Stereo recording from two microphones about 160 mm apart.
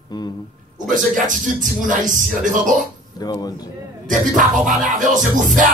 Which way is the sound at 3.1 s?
25° left (ahead or behind).